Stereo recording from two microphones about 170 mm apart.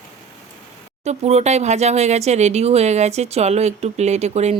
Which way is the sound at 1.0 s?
40° right (ahead or behind).